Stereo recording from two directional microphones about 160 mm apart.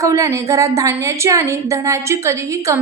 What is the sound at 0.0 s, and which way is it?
A woman's voice, 20° right (ahead or behind).